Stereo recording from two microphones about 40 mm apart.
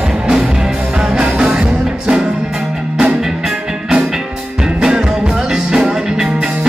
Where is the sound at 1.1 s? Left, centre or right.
Right.